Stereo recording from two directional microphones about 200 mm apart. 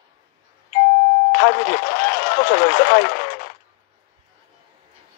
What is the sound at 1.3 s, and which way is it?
Speech, 45° left (ahead or behind).